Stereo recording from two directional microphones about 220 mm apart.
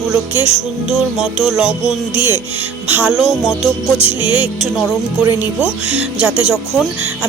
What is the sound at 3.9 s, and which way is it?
Music, 25° left (ahead or behind).